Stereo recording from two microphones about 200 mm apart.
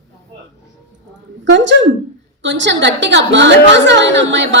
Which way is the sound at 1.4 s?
65° right (ahead or behind).